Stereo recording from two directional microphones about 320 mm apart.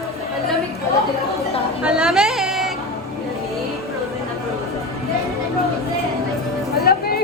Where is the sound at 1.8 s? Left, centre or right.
Centre.